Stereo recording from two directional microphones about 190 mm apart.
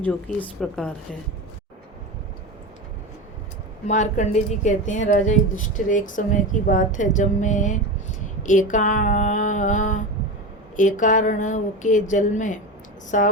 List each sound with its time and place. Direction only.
0.0 s a woman's voice: 5° left (ahead or behind)
3.8 s speech: 40° left (ahead or behind)